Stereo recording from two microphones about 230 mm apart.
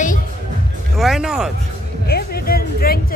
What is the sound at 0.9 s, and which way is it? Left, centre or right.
Speech, centre.